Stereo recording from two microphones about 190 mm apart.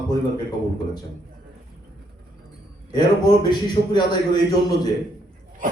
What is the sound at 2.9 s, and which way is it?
A man's voice, 25° left (ahead or behind).